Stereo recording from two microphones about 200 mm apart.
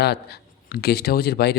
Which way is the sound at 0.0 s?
55° left (ahead or behind).